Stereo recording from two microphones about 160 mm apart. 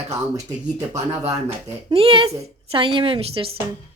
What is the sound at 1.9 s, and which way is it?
A woman's voice, 35° right (ahead or behind).